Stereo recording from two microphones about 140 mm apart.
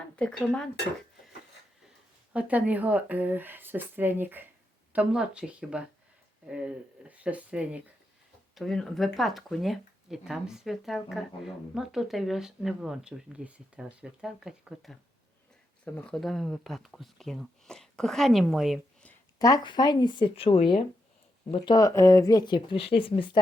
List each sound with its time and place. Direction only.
0.2 s speech: 5° left (ahead or behind)
2.3 s speech: 10° right (ahead or behind)
8.5 s speech: centre (ahead or behind)
15.8 s speech: 10° left (ahead or behind)
19.4 s speech: 25° left (ahead or behind)